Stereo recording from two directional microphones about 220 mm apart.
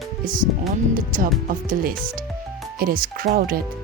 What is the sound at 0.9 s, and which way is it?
Speech, 40° right (ahead or behind).